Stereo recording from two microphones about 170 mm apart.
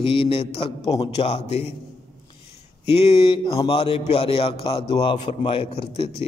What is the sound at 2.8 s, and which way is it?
A man's voice, 35° left (ahead or behind).